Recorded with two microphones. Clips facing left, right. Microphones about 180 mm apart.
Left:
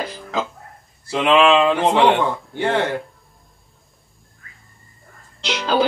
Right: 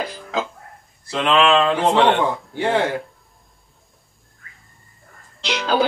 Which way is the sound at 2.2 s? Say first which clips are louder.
Even; 10° right (ahead or behind).